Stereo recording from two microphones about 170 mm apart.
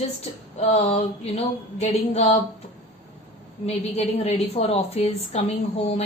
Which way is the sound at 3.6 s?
40° left (ahead or behind).